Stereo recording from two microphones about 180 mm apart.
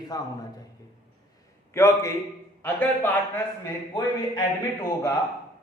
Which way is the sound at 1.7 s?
15° left (ahead or behind).